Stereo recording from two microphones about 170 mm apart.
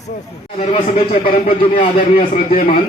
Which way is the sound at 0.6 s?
35° left (ahead or behind).